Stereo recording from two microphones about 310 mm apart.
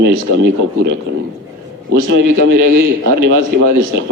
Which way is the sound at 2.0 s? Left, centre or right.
Right.